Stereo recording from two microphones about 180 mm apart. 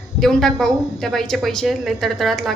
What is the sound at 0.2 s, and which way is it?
A woman's voice, centre (ahead or behind).